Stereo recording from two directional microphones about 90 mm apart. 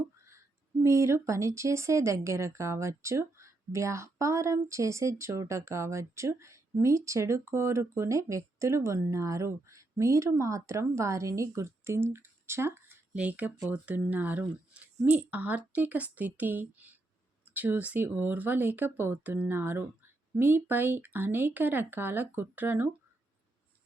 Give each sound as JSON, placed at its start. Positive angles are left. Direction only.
{"t": 0.3, "sound": "speech", "side_deg": -30}
{"t": 13.1, "sound": "a woman's voice", "side_deg": -15}